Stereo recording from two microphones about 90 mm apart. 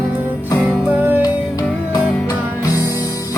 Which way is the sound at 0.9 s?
20° right (ahead or behind).